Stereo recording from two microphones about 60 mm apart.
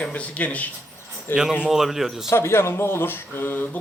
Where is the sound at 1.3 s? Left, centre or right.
Left.